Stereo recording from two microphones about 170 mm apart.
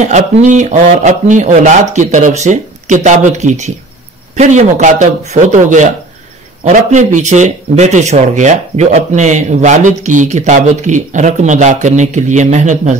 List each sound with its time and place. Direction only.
0.0 s a man's voice: 45° right (ahead or behind)